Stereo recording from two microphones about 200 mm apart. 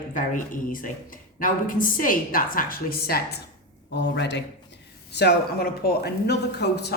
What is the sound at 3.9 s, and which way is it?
Speech, 60° left (ahead or behind).